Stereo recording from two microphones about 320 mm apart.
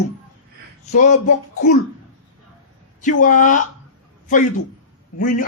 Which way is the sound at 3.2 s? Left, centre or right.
Left.